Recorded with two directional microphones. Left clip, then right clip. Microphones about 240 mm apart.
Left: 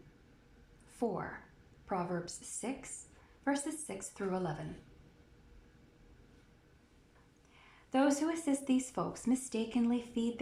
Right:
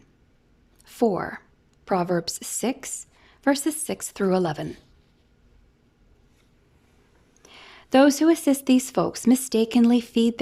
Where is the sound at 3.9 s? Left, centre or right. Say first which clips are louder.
Right 14 dB; right.